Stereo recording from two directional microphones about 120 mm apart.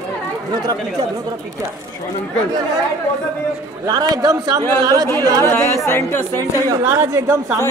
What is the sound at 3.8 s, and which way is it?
A man's voice, 35° right (ahead or behind).